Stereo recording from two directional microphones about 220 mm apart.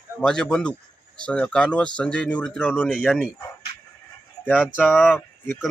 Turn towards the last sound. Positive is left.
turn(degrees=10)  # may be behind; listen again after turning